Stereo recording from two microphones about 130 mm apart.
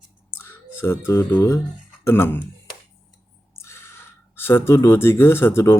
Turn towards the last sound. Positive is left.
turn(degrees=20)  # may be behind; listen again after turning